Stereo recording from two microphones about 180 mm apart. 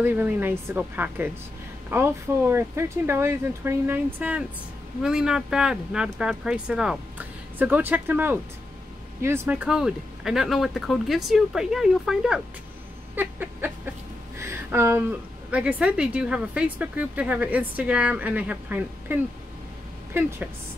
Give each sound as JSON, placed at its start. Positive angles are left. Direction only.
{"t": 0.0, "sound": "a woman's voice", "side_deg": -10}
{"t": 13.1, "sound": "a sound", "side_deg": -10}
{"t": 14.4, "sound": "a woman's voice", "side_deg": -15}